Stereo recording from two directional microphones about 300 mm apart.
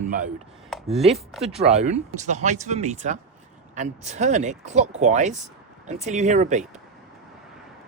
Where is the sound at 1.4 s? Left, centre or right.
Right.